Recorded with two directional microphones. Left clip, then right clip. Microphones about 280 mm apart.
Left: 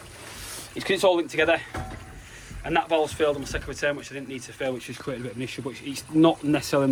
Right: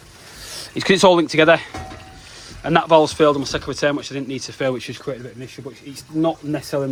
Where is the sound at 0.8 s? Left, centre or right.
Right.